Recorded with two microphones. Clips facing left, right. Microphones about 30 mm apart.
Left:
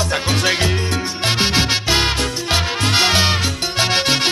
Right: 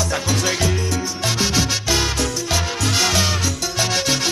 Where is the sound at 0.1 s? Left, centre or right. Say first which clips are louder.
Left 3 dB; left.